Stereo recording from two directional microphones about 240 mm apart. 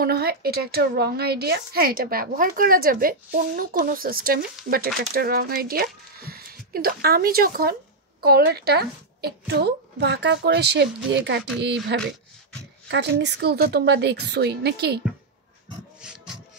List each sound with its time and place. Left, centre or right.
0.0 s a woman's voice: right
16.0 s music: centre